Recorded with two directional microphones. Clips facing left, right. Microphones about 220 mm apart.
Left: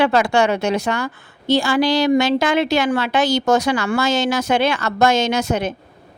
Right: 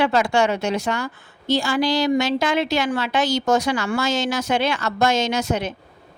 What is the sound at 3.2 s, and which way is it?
Speech, 80° left.